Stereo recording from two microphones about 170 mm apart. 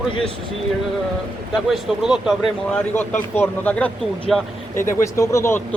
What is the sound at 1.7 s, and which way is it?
Speech, centre (ahead or behind).